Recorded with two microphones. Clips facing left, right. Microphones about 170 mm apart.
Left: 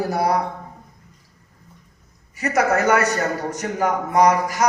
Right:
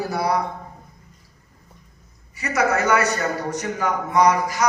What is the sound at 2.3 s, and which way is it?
A man's voice, 50° left (ahead or behind).